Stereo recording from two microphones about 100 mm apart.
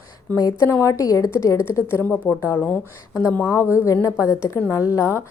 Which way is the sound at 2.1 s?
20° left (ahead or behind).